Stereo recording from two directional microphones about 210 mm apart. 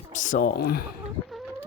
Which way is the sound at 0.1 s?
35° left (ahead or behind).